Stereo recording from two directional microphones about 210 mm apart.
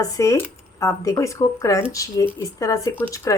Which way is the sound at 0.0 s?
15° left (ahead or behind).